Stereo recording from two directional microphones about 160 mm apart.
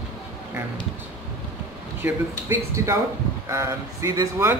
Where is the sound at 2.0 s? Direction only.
15° right (ahead or behind).